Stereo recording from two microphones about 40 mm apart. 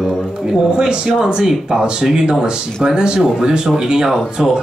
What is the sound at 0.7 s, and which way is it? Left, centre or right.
Speech, right.